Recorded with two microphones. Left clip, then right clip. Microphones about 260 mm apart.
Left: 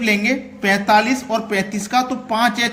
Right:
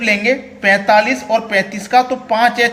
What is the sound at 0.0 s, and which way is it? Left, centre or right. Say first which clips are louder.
A man's voice: right 4 dB; centre.